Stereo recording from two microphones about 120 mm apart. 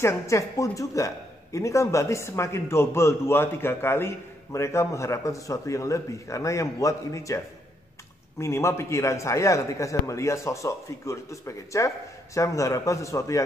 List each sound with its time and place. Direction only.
0.0 s speech: 25° left (ahead or behind)